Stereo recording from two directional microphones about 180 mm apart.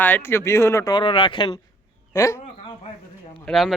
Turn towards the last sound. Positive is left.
turn(degrees=0)  # may be behind; listen again after turning